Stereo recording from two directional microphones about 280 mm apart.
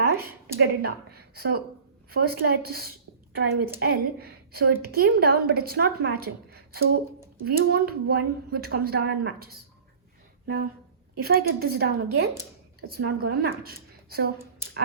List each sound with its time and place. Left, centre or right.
0.1 s a woman's voice: right